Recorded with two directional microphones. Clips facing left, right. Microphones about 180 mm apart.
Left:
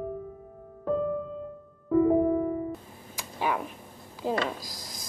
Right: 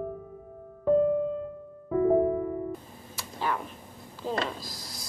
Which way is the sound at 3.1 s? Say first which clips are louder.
Left 2 dB; 15° left (ahead or behind).